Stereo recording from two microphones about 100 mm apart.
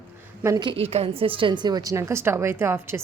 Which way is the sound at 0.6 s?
65° right (ahead or behind).